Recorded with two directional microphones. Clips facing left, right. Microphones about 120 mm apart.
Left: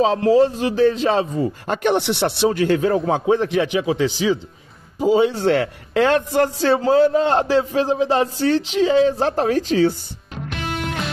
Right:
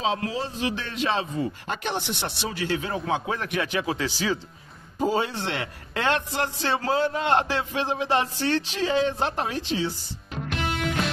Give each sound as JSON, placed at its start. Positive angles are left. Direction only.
{"t": 0.0, "sound": "speech", "side_deg": 45}
{"t": 3.3, "sound": "speech", "side_deg": 30}
{"t": 3.6, "sound": "a man's voice", "side_deg": 15}
{"t": 5.3, "sound": "a man's voice", "side_deg": 40}
{"t": 6.9, "sound": "a man's voice", "side_deg": 30}